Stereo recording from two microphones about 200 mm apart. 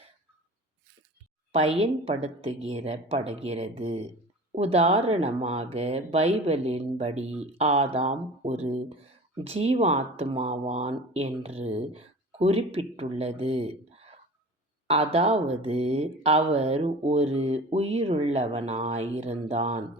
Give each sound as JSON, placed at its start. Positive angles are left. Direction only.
{"t": 1.5, "sound": "speech", "side_deg": -30}